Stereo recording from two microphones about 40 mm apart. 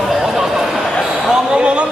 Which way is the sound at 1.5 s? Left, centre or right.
Right.